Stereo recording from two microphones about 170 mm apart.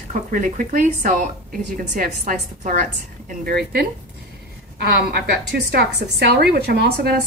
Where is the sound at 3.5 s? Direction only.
70° right (ahead or behind).